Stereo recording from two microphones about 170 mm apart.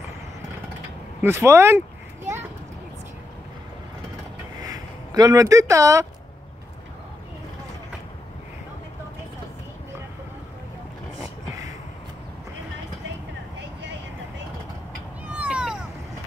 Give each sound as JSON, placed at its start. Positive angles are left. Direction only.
{"t": 1.2, "sound": "speech", "side_deg": -15}
{"t": 4.6, "sound": "speech", "side_deg": -20}
{"t": 15.2, "sound": "a sound", "side_deg": -10}